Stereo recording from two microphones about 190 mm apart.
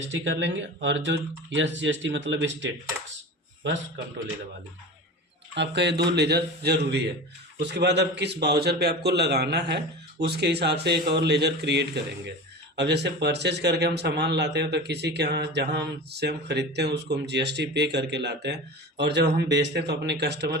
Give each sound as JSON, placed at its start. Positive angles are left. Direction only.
{"t": 0.1, "sound": "speech", "side_deg": -70}
{"t": 5.5, "sound": "speech", "side_deg": -65}